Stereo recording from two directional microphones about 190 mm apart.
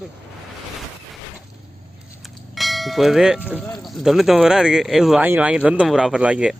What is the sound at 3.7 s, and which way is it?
Speech, centre (ahead or behind).